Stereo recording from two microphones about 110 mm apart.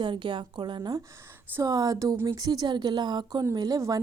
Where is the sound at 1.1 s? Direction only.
25° right (ahead or behind).